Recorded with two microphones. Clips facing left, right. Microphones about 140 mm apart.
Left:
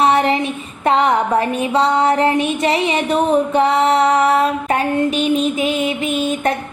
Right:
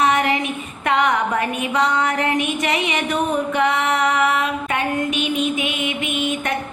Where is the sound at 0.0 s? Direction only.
30° left (ahead or behind).